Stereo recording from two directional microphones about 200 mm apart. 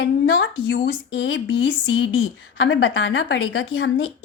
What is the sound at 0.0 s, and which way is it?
Speech, 55° left (ahead or behind).